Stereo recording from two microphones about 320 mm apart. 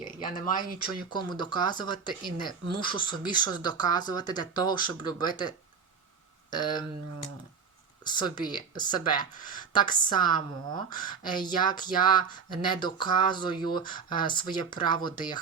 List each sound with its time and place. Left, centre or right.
1.1 s speech: centre
8.0 s speech: centre